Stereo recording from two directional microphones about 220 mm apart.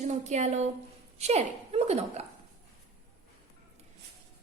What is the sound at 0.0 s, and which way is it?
A woman's voice, 30° right (ahead or behind).